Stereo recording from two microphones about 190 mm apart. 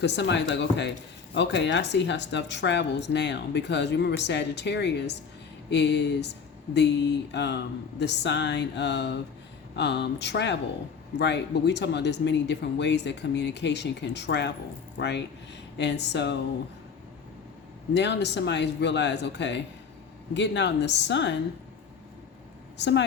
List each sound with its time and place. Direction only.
0.0 s speech: 65° left (ahead or behind)
17.9 s speech: 65° left (ahead or behind)
22.8 s speech: 65° left (ahead or behind)